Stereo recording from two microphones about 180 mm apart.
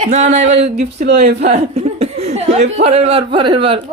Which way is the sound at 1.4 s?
35° right (ahead or behind).